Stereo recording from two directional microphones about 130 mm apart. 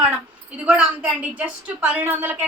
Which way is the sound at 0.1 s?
10° right (ahead or behind).